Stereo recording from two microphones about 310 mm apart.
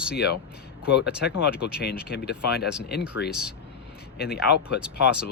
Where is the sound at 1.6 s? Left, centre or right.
Left.